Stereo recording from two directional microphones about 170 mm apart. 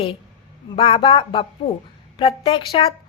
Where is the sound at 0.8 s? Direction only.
35° left (ahead or behind).